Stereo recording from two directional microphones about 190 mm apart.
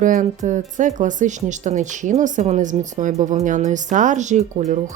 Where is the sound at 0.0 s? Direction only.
45° right (ahead or behind).